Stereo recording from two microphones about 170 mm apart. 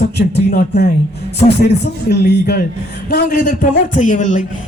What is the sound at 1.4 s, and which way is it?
Speech, 35° left (ahead or behind).